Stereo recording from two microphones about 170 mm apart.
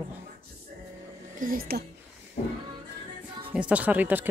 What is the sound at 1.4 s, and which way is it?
Speech, 60° right (ahead or behind).